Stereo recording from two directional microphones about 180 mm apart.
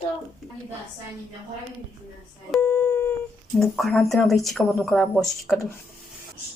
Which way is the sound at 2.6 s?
15° left (ahead or behind).